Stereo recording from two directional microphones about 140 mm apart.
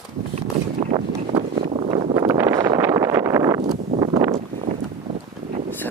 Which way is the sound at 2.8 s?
20° right (ahead or behind).